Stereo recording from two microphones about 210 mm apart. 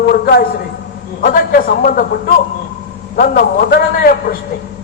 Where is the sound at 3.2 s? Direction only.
45° left (ahead or behind).